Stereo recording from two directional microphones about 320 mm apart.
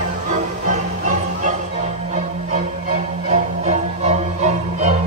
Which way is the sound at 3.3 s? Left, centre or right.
Right.